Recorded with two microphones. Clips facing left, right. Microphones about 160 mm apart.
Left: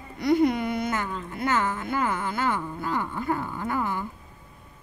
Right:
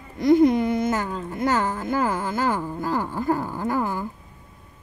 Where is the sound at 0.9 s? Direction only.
40° right (ahead or behind).